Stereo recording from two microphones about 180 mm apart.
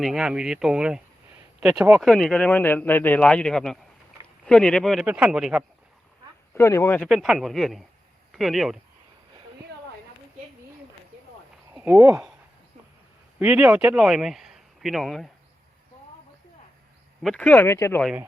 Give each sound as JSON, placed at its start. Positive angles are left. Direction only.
{"t": 0.0, "sound": "speech", "side_deg": 0}
{"t": 6.5, "sound": "speech", "side_deg": 15}
{"t": 7.1, "sound": "speech", "side_deg": 0}
{"t": 11.7, "sound": "speech", "side_deg": -10}
{"t": 13.4, "sound": "speech", "side_deg": -5}
{"t": 17.2, "sound": "speech", "side_deg": 5}